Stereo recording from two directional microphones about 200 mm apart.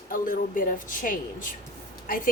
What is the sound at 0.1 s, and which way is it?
A woman's voice, 45° left (ahead or behind).